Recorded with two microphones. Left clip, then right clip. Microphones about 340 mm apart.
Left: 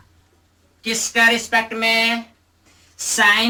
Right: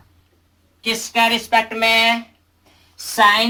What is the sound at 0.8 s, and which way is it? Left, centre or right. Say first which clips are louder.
A woman's voice: even; centre.